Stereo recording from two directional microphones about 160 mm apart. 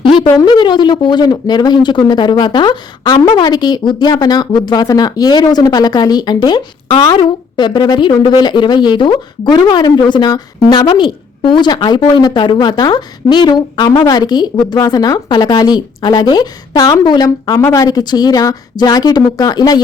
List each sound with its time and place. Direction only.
0.3 s speech: 25° left (ahead or behind)